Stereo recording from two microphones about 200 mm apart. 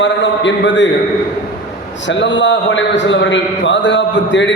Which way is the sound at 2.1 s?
65° left (ahead or behind).